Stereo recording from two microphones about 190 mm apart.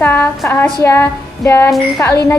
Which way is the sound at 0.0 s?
10° left (ahead or behind).